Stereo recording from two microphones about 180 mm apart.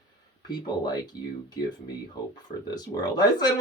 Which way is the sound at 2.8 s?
20° left (ahead or behind).